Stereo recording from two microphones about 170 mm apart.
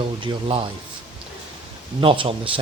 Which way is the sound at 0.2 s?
30° right (ahead or behind).